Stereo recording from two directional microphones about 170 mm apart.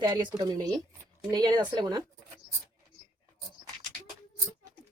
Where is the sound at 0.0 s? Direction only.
25° right (ahead or behind).